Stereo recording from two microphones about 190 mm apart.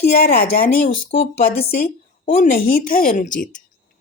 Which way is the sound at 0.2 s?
50° left (ahead or behind).